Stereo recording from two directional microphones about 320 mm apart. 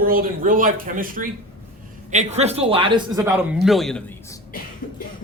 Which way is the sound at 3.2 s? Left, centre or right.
Centre.